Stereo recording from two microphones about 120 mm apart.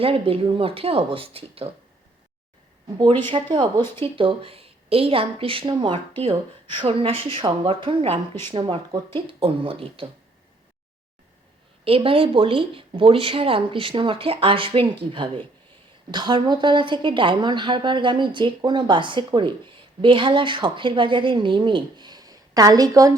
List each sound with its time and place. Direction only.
0.0 s speech: 50° right (ahead or behind)
3.2 s speech: 45° right (ahead or behind)
11.9 s a woman's voice: 50° right (ahead or behind); by 23.1 s 30° right (ahead or behind)